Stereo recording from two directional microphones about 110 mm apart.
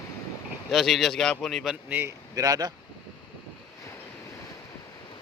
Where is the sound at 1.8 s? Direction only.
20° right (ahead or behind).